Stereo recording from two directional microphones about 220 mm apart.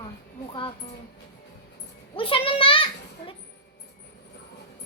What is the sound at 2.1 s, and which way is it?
A child's voice, 25° left (ahead or behind).